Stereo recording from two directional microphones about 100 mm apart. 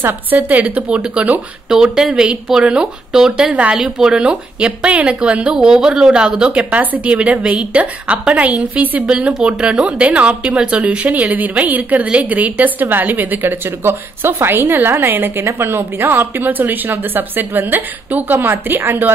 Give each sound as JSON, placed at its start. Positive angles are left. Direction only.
{"t": 0.0, "sound": "a woman's voice", "side_deg": -20}